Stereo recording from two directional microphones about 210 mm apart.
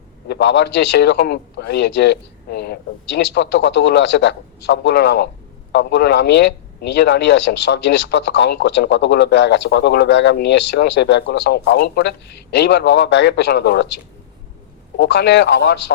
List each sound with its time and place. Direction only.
0.3 s a man's voice: 55° left (ahead or behind)
14.9 s speech: 55° left (ahead or behind)